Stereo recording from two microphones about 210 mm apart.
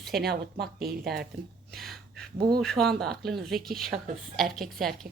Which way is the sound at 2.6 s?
Centre (ahead or behind).